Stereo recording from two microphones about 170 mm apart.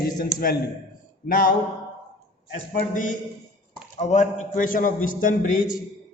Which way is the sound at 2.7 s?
50° left (ahead or behind).